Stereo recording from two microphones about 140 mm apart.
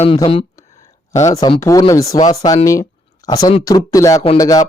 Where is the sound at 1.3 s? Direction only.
25° left (ahead or behind).